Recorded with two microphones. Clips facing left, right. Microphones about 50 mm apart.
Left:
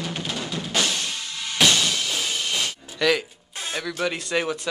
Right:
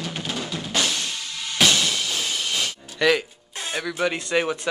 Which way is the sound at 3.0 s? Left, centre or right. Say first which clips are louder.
Right 2 dB; centre.